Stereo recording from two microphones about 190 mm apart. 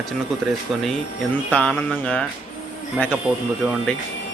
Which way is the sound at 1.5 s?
5° left (ahead or behind).